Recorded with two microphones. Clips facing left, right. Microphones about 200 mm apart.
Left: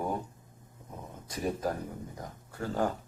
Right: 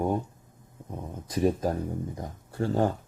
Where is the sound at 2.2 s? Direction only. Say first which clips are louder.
Right 7 dB; 30° right (ahead or behind).